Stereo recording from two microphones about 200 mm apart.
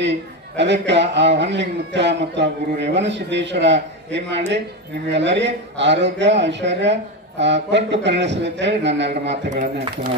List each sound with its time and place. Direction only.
0.0 s a man's voice: 60° right (ahead or behind)